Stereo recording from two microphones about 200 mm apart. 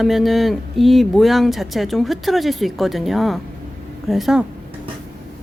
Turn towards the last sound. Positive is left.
turn(degrees=0)  # may be behind; listen again after turning